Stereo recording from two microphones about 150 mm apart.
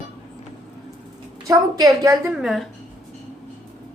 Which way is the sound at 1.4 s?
20° right (ahead or behind).